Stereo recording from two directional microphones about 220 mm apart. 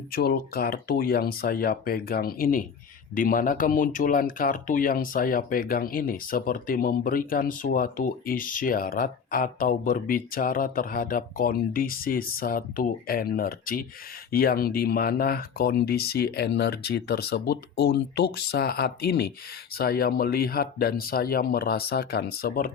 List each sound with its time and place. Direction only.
0.1 s speech: 45° left (ahead or behind)